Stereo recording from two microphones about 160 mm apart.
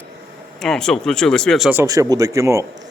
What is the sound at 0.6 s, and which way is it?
Speech, 5° left (ahead or behind).